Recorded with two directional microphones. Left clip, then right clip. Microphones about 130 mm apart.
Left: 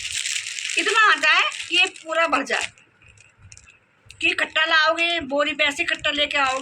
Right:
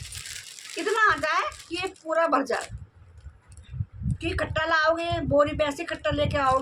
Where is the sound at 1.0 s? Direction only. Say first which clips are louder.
Left 6 dB; 35° right (ahead or behind).